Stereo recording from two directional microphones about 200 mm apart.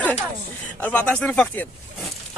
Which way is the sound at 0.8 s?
5° left (ahead or behind).